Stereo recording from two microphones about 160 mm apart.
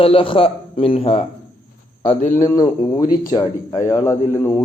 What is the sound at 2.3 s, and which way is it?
Speech, 15° left (ahead or behind).